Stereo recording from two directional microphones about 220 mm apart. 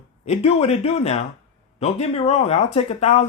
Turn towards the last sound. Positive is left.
turn(degrees=30)  # may be behind; listen again after turning